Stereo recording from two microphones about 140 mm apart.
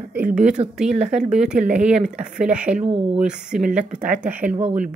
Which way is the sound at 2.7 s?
50° right (ahead or behind).